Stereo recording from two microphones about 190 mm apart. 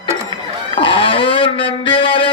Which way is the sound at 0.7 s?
25° left (ahead or behind).